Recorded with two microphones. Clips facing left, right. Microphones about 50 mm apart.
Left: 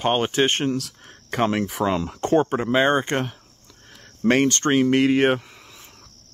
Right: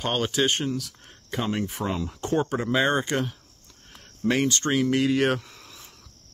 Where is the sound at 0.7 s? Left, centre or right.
Left.